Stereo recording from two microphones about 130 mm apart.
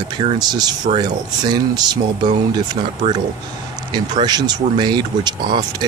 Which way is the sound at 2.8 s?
55° right (ahead or behind).